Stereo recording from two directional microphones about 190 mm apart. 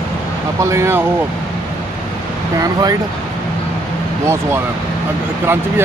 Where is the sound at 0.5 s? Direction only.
15° right (ahead or behind).